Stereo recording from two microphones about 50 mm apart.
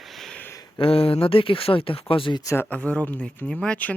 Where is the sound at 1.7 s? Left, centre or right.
Left.